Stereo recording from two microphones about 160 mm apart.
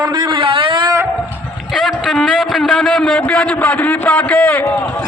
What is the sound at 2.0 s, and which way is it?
A man's voice, centre (ahead or behind).